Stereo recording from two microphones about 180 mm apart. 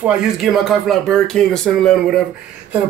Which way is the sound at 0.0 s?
5° right (ahead or behind).